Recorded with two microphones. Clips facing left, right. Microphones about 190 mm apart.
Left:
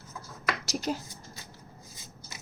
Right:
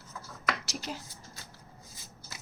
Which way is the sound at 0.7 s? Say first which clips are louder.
Left 7 dB; 45° left (ahead or behind).